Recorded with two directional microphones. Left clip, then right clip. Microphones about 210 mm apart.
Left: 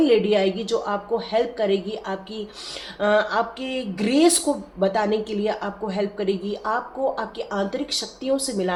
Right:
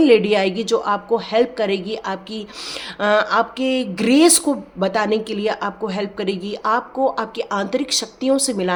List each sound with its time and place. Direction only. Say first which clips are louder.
0.0 s speech: right 4 dB; 40° right (ahead or behind)